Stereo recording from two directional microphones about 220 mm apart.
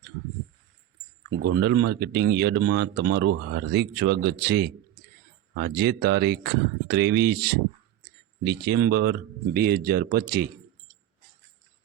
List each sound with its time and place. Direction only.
1.3 s speech: 50° right (ahead or behind)